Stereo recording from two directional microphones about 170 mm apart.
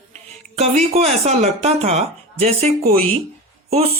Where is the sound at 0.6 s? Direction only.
40° right (ahead or behind).